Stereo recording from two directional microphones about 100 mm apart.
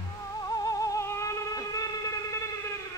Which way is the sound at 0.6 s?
35° left (ahead or behind).